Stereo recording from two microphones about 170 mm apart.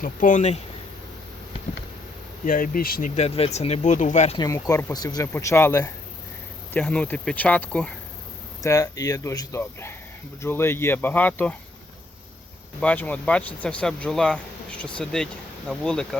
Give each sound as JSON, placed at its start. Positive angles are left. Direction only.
{"t": 0.0, "sound": "speech", "side_deg": 50}
{"t": 2.4, "sound": "speech", "side_deg": 55}
{"t": 3.2, "sound": "speech", "side_deg": 35}
{"t": 4.4, "sound": "speech", "side_deg": 20}
{"t": 8.6, "sound": "speech", "side_deg": 20}
{"t": 12.8, "sound": "speech", "side_deg": 10}